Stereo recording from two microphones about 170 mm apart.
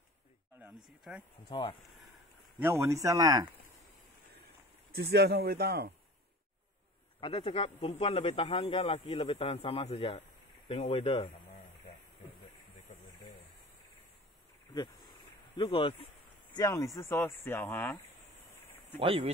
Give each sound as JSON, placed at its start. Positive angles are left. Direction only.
{"t": 0.6, "sound": "speech", "side_deg": -5}
{"t": 1.5, "sound": "speech", "side_deg": 30}
{"t": 2.6, "sound": "a man's voice", "side_deg": -15}
{"t": 4.9, "sound": "speech", "side_deg": -70}
{"t": 7.2, "sound": "speech", "side_deg": 30}
{"t": 15.5, "sound": "speech", "side_deg": 30}
{"t": 16.5, "sound": "speech", "side_deg": 20}
{"t": 18.9, "sound": "speech", "side_deg": -35}